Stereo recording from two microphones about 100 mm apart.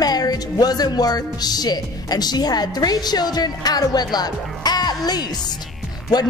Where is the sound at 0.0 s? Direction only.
40° left (ahead or behind).